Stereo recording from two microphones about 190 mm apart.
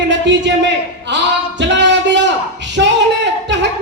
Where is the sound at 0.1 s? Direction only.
70° right (ahead or behind).